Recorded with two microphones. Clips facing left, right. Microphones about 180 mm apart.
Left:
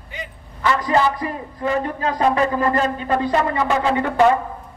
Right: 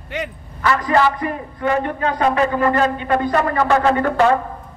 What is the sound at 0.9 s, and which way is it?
Music, 30° left (ahead or behind).